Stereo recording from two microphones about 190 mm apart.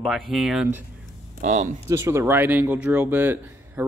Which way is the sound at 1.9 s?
15° right (ahead or behind).